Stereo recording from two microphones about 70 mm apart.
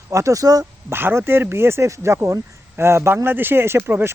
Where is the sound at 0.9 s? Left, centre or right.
Right.